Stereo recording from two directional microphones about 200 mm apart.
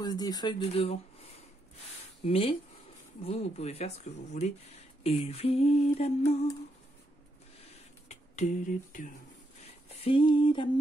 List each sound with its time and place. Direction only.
0.0 s speech: 20° left (ahead or behind)
0.6 s speech: 30° left (ahead or behind)
3.2 s humming: 30° left (ahead or behind)
8.1 s speech: 40° left (ahead or behind)
9.8 s a sound: 30° left (ahead or behind)